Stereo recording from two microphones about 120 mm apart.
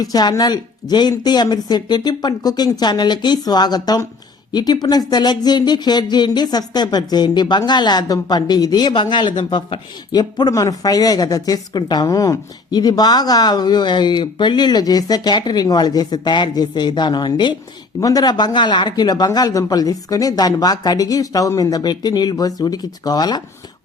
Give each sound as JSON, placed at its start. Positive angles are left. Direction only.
{"t": 0.0, "sound": "speech", "side_deg": 35}